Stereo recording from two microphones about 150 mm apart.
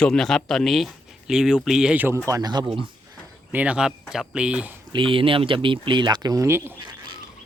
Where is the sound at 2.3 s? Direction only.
25° right (ahead or behind).